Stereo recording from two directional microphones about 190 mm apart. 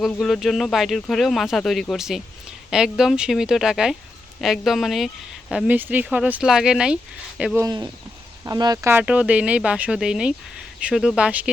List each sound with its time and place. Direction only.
0.1 s speech: centre (ahead or behind)
7.6 s speech: 20° right (ahead or behind); by 11.5 s 5° right (ahead or behind)